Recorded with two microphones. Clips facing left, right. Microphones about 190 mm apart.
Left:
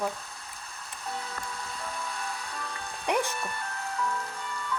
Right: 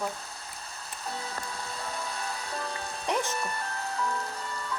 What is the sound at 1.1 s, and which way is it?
Music, 30° right (ahead or behind).